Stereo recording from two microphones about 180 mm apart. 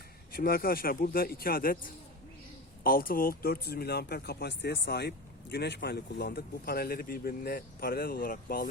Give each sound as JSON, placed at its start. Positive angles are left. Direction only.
{"t": 0.3, "sound": "speech", "side_deg": 55}